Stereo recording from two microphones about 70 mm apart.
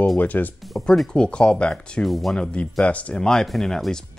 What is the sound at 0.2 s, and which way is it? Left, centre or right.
Speech, left.